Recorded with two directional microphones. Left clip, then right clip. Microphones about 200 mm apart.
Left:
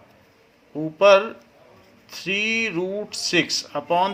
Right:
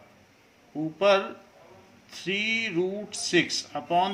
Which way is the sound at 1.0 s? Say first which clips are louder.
Left 8 dB; 45° left (ahead or behind).